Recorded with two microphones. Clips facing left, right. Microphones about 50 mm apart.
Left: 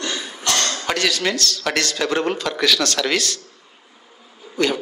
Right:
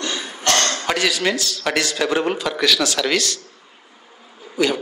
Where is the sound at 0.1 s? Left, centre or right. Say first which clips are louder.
Right 1 dB; centre.